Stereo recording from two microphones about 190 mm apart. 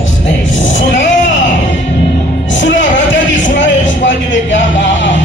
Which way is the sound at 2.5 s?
75° left (ahead or behind).